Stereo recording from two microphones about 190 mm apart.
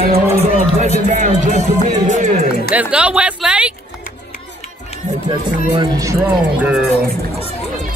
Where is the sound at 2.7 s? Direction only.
5° right (ahead or behind).